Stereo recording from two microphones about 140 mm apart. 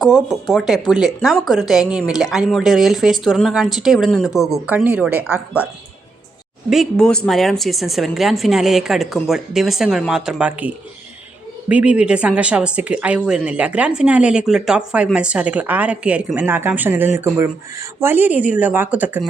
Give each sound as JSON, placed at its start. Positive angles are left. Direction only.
{"t": 0.0, "sound": "speech", "side_deg": 0}
{"t": 6.7, "sound": "speech", "side_deg": 0}
{"t": 11.7, "sound": "speech", "side_deg": -10}